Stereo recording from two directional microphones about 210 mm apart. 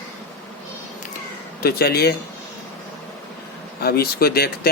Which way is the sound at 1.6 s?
50° left (ahead or behind).